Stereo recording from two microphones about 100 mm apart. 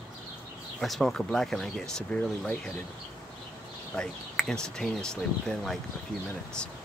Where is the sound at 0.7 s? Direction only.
Centre (ahead or behind).